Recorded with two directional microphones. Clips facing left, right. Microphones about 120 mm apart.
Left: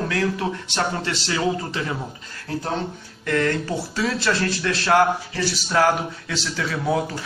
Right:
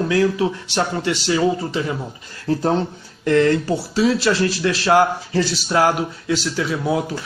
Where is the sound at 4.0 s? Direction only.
20° right (ahead or behind).